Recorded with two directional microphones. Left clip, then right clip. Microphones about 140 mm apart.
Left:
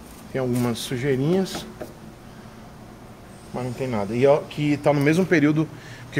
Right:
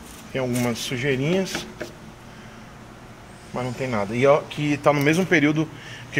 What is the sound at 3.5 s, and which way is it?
Speech, 20° left (ahead or behind).